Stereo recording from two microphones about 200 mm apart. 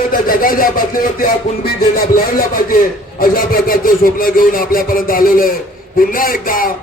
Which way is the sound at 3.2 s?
45° left (ahead or behind).